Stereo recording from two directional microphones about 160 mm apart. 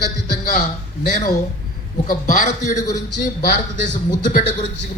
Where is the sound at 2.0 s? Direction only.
55° left (ahead or behind).